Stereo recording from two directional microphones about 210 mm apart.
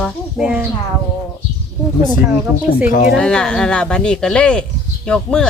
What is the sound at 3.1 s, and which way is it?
Speech, 5° left (ahead or behind).